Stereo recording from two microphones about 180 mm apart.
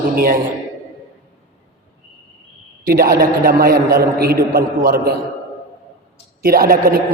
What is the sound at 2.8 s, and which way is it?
A man's voice, 55° right (ahead or behind).